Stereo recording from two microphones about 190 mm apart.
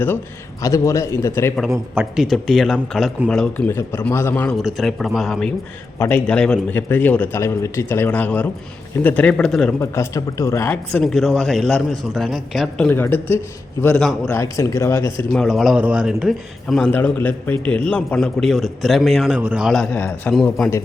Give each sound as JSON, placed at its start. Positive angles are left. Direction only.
{"t": 0.6, "sound": "a man's voice", "side_deg": 15}
{"t": 1.7, "sound": "a man's voice", "side_deg": -5}
{"t": 4.5, "sound": "a man's voice", "side_deg": 0}
{"t": 9.8, "sound": "a man's voice", "side_deg": 15}
{"t": 11.0, "sound": "speech", "side_deg": 0}
{"t": 14.3, "sound": "a man's voice", "side_deg": 15}
{"t": 15.2, "sound": "speech", "side_deg": 5}